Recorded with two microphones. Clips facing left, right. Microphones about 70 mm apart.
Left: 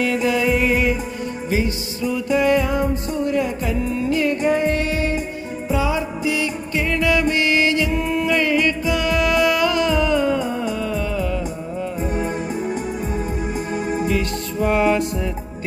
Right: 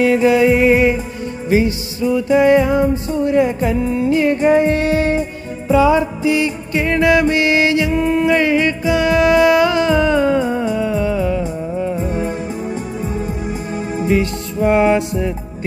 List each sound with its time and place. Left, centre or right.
0.0 s music: right
14.2 s music: right